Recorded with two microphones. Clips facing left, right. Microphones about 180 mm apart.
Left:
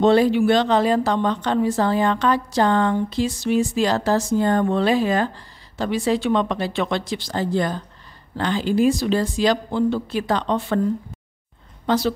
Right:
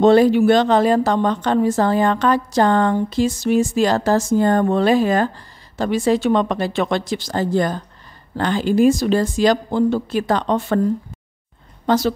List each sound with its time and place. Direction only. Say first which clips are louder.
0.0 s speech: right 4 dB; 45° right (ahead or behind)
11.8 s a woman's voice: right 3 dB; 45° right (ahead or behind)